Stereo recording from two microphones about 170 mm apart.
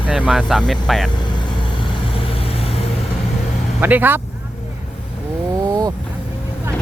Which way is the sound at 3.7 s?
10° right (ahead or behind).